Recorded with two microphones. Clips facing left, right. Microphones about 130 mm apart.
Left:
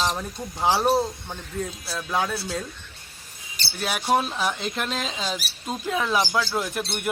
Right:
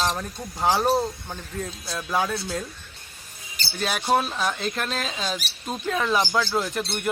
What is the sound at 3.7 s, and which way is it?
Speech, 10° left (ahead or behind).